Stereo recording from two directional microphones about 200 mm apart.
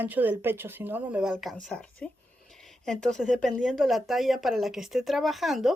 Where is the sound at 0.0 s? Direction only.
10° right (ahead or behind).